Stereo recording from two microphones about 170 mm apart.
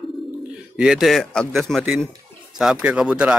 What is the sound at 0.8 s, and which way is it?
Speech, 5° right (ahead or behind).